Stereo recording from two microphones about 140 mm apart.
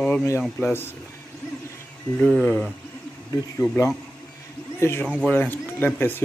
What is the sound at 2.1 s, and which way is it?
Speech, 5° left (ahead or behind).